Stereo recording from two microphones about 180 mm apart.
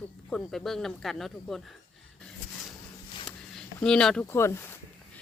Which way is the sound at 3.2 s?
5° left (ahead or behind).